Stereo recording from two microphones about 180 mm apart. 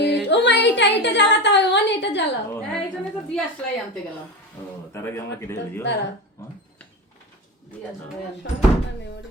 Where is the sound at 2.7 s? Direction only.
Centre (ahead or behind).